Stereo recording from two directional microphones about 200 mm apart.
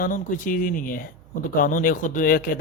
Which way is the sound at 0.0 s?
40° left (ahead or behind).